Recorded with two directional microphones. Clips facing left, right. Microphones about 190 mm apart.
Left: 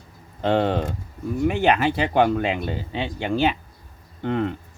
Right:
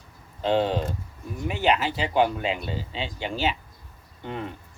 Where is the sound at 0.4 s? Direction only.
60° left (ahead or behind).